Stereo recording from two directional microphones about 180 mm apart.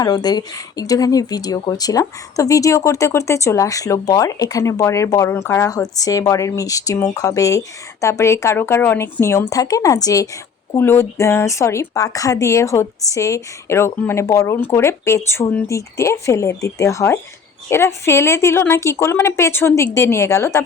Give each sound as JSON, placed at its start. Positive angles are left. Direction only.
{"t": 0.0, "sound": "a woman's voice", "side_deg": 20}